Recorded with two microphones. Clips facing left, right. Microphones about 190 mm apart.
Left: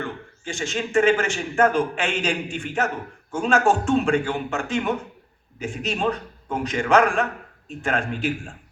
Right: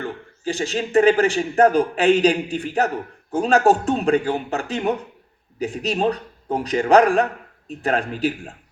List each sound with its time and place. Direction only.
0.0 s a man's voice: 35° right (ahead or behind)